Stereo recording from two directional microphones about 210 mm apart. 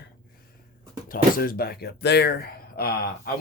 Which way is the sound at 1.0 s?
45° left (ahead or behind).